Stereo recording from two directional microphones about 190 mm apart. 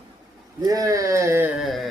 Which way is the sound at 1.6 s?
Centre (ahead or behind).